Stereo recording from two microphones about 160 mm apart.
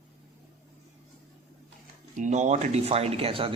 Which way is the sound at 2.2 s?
50° right (ahead or behind).